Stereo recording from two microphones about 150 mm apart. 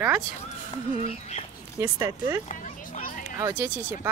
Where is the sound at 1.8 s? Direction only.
20° right (ahead or behind).